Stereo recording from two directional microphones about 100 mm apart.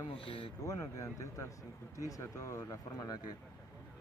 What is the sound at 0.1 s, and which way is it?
Speech, 65° left (ahead or behind).